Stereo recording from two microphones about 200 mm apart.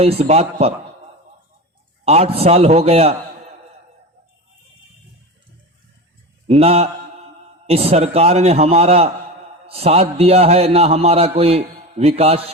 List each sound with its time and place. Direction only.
0.0 s a man's voice: 30° right (ahead or behind)
2.0 s a man's voice: 30° right (ahead or behind)
6.5 s a man's voice: 30° right (ahead or behind)